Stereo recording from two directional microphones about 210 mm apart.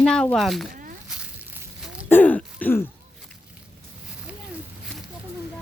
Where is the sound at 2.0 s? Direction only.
10° left (ahead or behind).